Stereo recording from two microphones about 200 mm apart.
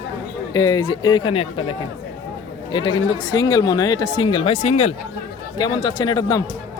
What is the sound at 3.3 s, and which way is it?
Speech, 20° left (ahead or behind).